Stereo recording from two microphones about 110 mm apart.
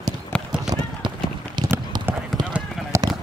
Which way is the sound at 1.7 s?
20° right (ahead or behind).